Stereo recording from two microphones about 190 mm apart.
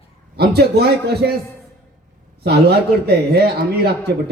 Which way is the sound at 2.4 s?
60° right (ahead or behind).